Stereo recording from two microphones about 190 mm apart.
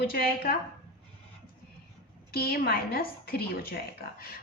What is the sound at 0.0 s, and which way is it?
Speech, 55° left (ahead or behind).